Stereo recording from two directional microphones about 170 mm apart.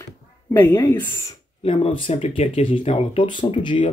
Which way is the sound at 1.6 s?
35° left (ahead or behind).